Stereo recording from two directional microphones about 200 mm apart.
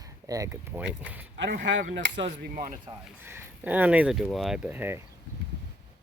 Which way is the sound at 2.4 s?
45° right (ahead or behind).